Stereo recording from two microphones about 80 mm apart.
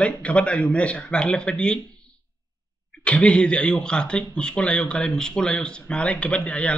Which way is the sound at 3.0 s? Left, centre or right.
Centre.